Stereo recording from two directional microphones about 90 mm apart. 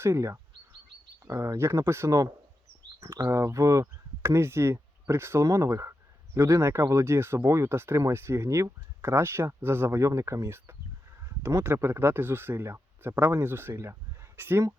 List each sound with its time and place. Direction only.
0.0 s speech: 30° right (ahead or behind)